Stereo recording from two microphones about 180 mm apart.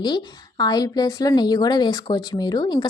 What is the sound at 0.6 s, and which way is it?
A woman's voice, 20° left (ahead or behind).